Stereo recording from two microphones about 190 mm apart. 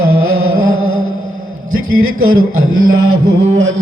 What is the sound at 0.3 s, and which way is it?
Music, 90° right.